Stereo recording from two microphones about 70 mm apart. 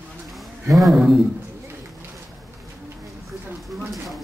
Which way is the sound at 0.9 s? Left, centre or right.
Centre.